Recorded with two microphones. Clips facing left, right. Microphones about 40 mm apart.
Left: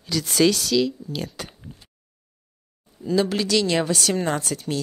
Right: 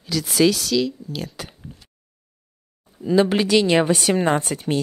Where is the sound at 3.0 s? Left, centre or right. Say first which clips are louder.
Right 4 dB; right.